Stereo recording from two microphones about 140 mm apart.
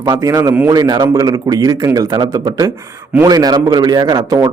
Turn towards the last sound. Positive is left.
turn(degrees=-25)  # may be behind; listen again after turning